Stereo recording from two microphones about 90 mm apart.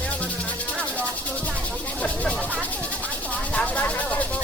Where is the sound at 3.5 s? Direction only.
15° left (ahead or behind).